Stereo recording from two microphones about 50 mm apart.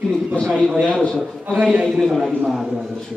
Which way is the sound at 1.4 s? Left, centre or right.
Right.